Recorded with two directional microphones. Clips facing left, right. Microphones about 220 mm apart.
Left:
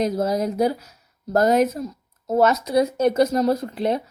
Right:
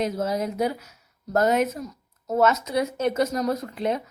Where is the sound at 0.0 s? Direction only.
35° left (ahead or behind).